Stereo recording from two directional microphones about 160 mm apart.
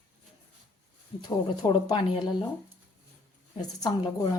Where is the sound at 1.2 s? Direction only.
25° left (ahead or behind).